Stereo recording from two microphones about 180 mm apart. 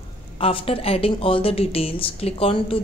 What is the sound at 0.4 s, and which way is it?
A woman's voice, 30° left (ahead or behind).